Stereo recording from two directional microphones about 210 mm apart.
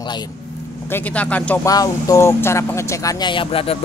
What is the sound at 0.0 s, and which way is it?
Speech, 20° left (ahead or behind).